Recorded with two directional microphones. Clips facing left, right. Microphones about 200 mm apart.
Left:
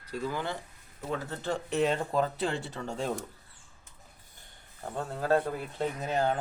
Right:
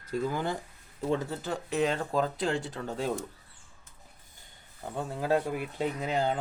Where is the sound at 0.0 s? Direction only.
45° right (ahead or behind).